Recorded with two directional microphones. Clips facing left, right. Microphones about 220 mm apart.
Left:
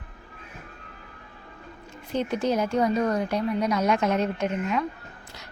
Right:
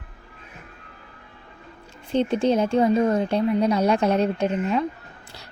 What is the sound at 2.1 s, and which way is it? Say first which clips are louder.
Speech: right 5 dB; 30° right (ahead or behind).